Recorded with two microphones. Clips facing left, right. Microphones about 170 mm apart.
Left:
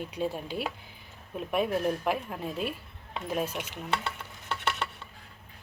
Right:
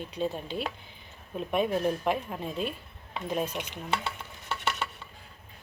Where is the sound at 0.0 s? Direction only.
10° left (ahead or behind).